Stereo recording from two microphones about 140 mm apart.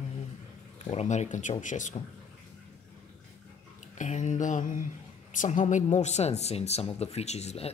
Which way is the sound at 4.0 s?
60° left (ahead or behind).